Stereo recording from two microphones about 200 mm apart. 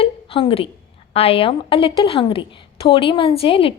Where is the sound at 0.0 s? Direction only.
30° left (ahead or behind).